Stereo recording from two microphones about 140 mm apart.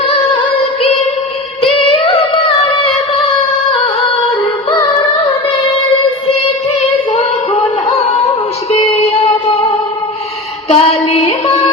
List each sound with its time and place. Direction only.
0.3 s music: 45° left (ahead or behind)
1.6 s singing: 40° left (ahead or behind)
7.1 s female singing: 50° left (ahead or behind)
8.7 s music: 45° left (ahead or behind)
10.7 s music: 45° left (ahead or behind)